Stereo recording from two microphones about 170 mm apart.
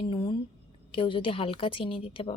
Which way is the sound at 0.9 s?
30° left (ahead or behind).